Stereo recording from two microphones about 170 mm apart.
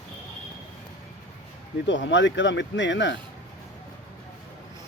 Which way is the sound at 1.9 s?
90° left.